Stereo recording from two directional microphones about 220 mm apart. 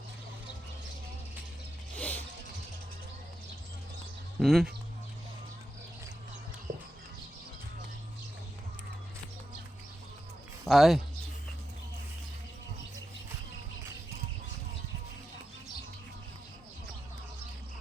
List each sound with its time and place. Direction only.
2.0 s music: 5° left (ahead or behind)
4.4 s speech: centre (ahead or behind)
6.7 s horse: 55° right (ahead or behind)
10.7 s speech: centre (ahead or behind)